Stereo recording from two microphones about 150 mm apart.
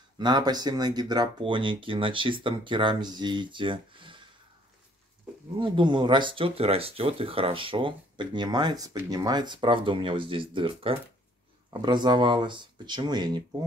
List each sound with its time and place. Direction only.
0.2 s speech: 30° right (ahead or behind)
5.6 s speech: 30° right (ahead or behind)